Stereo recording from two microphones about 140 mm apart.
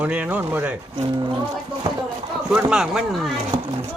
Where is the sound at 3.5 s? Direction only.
30° right (ahead or behind).